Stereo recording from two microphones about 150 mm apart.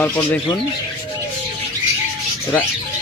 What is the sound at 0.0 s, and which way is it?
Speech, 10° left (ahead or behind).